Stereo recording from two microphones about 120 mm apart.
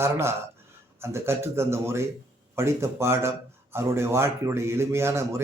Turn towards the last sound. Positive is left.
turn(degrees=-20)  # may be behind; listen again after turning